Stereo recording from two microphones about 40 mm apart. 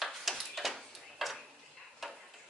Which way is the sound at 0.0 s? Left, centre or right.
Centre.